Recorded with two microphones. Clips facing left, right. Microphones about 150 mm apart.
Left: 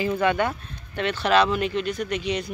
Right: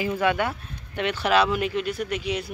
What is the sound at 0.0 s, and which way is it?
Speech, 10° right (ahead or behind).